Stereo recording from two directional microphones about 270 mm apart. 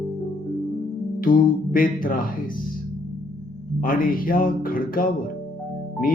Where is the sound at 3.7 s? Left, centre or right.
Left.